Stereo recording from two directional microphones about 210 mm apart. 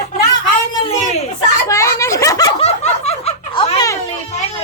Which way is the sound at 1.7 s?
15° left (ahead or behind).